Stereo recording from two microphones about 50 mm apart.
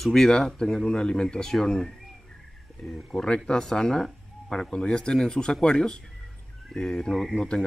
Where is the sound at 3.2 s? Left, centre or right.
Centre.